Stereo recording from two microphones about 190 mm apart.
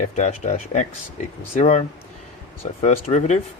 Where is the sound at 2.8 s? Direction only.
35° left (ahead or behind).